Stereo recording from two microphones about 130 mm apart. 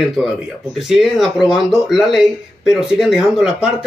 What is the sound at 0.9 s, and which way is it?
Speech, 5° right (ahead or behind).